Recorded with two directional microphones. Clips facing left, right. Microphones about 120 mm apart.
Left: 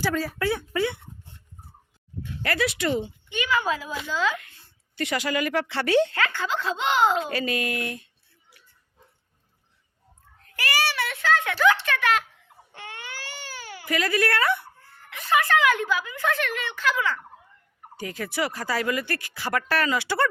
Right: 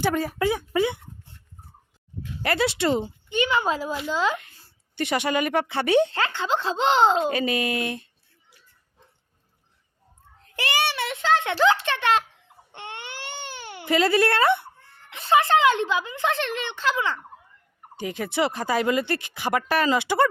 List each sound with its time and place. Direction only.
0.0 s a woman's voice: 20° right (ahead or behind)
2.4 s a woman's voice: 25° right (ahead or behind)
10.4 s a child's voice: 25° right (ahead or behind)
12.7 s baby cry: 25° right (ahead or behind)
15.1 s a woman's voice: 25° right (ahead or behind)